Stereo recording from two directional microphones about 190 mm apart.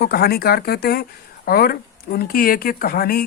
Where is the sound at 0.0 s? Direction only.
55° left (ahead or behind).